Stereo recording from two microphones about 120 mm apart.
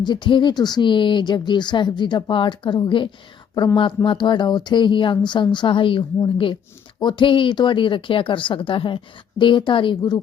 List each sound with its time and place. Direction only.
0.0 s speech: 40° left (ahead or behind)